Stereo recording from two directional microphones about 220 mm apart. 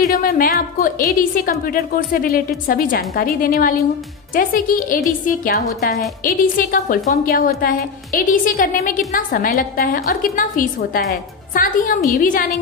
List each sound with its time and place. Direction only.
0.0 s a woman's voice: 40° left (ahead or behind)